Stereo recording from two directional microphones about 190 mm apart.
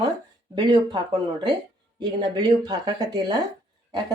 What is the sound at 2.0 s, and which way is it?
Speech, 25° right (ahead or behind).